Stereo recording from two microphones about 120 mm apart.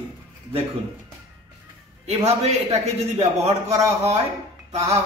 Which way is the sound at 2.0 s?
60° right (ahead or behind).